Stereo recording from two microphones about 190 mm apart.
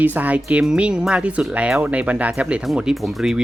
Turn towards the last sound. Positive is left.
turn(degrees=0)  # may be behind; listen again after turning